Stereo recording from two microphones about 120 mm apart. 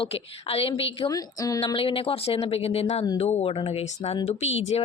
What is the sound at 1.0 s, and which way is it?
Speech, 30° left (ahead or behind).